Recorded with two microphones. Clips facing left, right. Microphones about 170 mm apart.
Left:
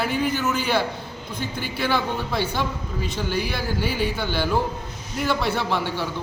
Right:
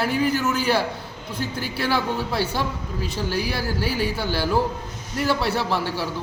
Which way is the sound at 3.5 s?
35° right (ahead or behind).